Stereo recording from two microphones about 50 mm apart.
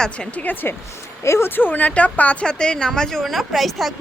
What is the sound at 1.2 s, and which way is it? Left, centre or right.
Speech, left.